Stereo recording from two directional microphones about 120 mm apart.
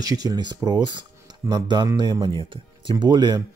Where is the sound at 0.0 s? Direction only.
30° right (ahead or behind).